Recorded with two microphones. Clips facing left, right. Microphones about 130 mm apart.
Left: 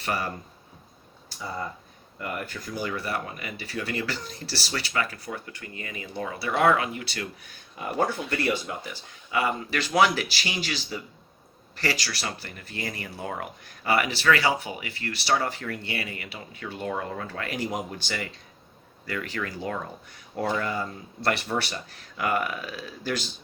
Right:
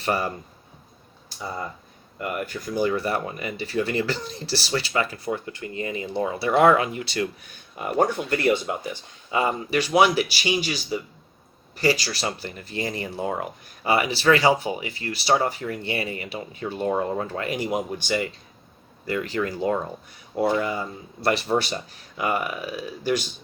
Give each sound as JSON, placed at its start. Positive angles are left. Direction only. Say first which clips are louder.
{"t": 0.0, "sound": "speech", "louder": "right 5 dB", "side_deg": -25}
{"t": 2.5, "sound": "speech", "louder": "right 8 dB", "side_deg": -25}
{"t": 8.8, "sound": "speech", "louder": "right 6 dB", "side_deg": -25}